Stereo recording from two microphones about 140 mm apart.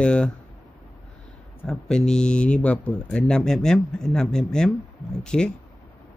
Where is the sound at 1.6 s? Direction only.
5° left (ahead or behind).